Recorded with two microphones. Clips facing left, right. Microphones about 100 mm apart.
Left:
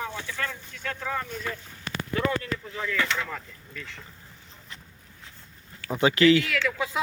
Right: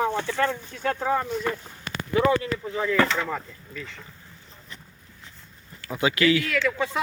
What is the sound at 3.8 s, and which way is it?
Speech, 5° right (ahead or behind).